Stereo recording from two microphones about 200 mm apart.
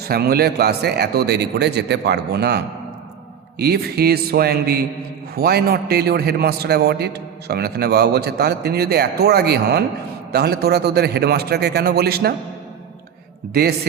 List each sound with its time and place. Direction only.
0.1 s a man's voice: 50° right (ahead or behind)
13.5 s a man's voice: 50° right (ahead or behind)